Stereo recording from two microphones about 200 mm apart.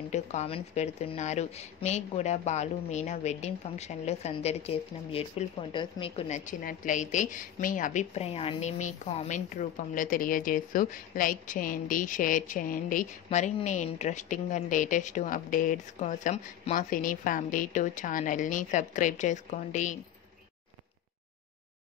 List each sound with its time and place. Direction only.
0.1 s a woman's voice: 35° left (ahead or behind)